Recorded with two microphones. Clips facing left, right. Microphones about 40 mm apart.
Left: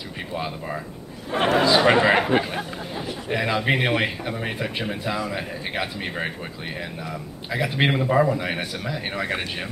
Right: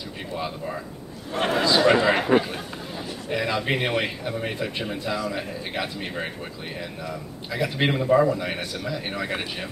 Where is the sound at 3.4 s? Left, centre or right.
Centre.